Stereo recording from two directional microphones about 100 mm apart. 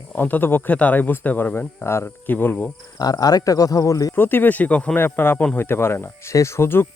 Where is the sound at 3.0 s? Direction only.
40° left (ahead or behind).